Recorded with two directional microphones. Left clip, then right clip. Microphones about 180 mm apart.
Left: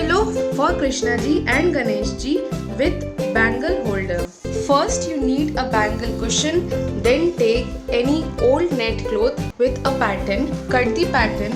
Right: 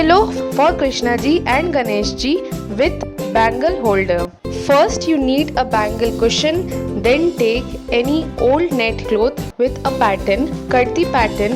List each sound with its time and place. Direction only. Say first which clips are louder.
0.0 s music: right 7 dB; 45° right (ahead or behind)
0.8 s speech: right 3 dB; 50° right (ahead or behind)
3.3 s speech: right 5 dB; 50° right (ahead or behind)